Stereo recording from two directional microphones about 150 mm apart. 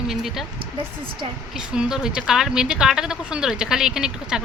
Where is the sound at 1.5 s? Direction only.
5° right (ahead or behind).